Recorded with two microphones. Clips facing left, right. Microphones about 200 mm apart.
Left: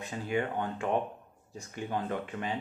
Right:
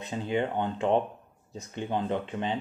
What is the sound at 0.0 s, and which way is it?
Speech, 25° right (ahead or behind).